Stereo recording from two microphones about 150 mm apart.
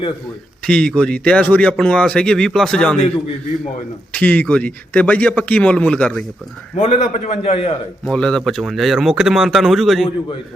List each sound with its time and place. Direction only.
0.6 s a man's voice: 5° left (ahead or behind)
4.1 s a man's voice: 10° left (ahead or behind)
6.7 s a man's voice: 40° left (ahead or behind)
8.0 s a man's voice: 5° left (ahead or behind)